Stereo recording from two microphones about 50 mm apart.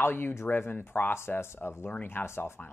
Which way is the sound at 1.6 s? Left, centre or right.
Left.